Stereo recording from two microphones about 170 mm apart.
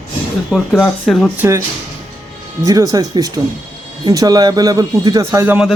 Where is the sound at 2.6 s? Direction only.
20° right (ahead or behind).